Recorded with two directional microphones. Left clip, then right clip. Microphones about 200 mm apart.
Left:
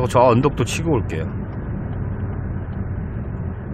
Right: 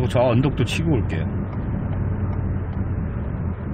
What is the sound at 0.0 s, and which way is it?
Speech, 30° left (ahead or behind).